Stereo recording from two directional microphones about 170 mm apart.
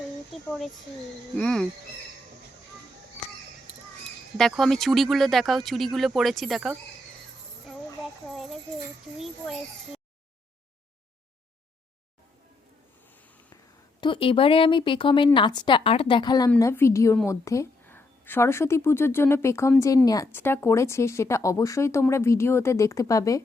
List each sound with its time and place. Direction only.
1.4 s speech: 5° left (ahead or behind)
4.4 s speech: centre (ahead or behind)
8.3 s a child's voice: centre (ahead or behind)
14.0 s a woman's voice: 30° left (ahead or behind)